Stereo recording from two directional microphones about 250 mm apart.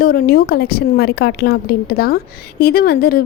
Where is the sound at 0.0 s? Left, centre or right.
Left.